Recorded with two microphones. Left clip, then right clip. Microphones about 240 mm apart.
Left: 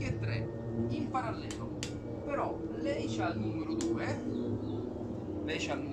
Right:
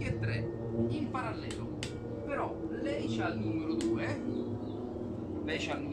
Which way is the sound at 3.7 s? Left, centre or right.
Centre.